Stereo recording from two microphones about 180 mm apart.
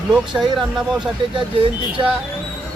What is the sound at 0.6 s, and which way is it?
Speech, centre (ahead or behind).